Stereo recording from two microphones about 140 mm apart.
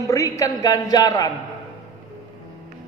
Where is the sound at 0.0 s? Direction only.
25° left (ahead or behind).